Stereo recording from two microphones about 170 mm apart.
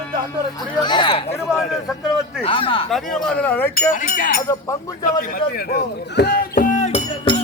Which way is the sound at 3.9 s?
50° left (ahead or behind).